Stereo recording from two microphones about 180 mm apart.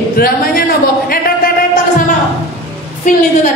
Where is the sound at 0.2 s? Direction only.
55° left (ahead or behind).